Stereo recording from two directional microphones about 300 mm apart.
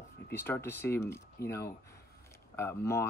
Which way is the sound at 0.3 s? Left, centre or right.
Centre.